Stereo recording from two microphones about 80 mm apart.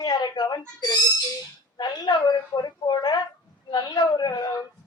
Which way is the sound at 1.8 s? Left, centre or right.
Left.